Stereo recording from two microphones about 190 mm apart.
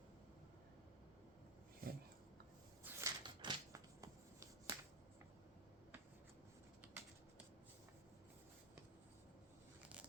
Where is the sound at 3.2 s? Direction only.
25° right (ahead or behind).